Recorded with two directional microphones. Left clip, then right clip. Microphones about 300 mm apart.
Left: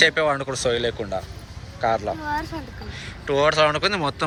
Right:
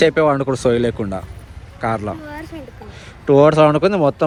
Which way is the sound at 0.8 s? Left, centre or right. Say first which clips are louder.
Right 4 dB; right.